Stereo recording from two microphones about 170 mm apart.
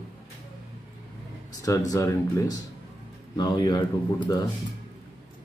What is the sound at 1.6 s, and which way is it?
Speech, 20° left (ahead or behind).